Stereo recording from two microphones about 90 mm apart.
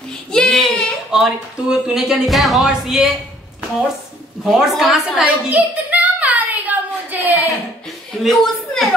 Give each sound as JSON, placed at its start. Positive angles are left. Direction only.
{"t": 0.3, "sound": "child singing", "side_deg": 5}
{"t": 1.1, "sound": "speech", "side_deg": -5}
{"t": 4.5, "sound": "speech", "side_deg": 0}
{"t": 5.2, "sound": "a sound", "side_deg": -15}
{"t": 8.2, "sound": "a woman's voice", "side_deg": 0}